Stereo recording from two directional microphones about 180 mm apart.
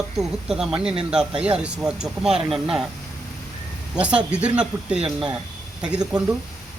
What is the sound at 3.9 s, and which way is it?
Speech, 5° right (ahead or behind).